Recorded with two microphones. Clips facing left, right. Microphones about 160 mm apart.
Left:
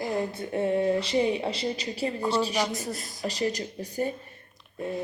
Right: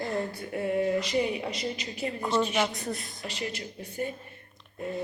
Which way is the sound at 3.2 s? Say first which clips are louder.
Left 7 dB; 40° left (ahead or behind).